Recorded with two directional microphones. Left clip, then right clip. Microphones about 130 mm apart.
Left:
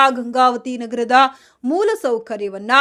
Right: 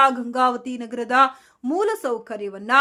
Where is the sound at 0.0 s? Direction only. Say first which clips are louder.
Left 4 dB; 25° left (ahead or behind).